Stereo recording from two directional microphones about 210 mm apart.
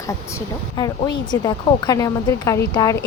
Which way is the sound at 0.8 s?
20° left (ahead or behind).